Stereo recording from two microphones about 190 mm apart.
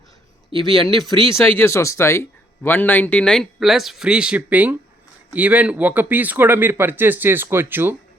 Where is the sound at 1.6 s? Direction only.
15° left (ahead or behind).